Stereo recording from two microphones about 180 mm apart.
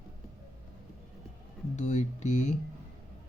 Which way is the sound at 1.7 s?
40° left (ahead or behind).